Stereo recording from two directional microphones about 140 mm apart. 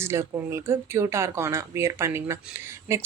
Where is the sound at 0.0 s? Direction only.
20° right (ahead or behind).